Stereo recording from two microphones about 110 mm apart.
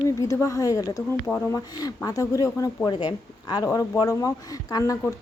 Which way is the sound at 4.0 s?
30° left (ahead or behind).